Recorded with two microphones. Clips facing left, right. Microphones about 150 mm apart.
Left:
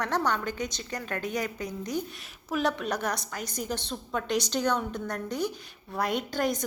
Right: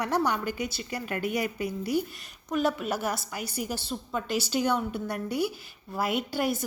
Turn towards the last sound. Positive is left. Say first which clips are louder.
# even
turn(degrees=-10)  # may be behind; listen again after turning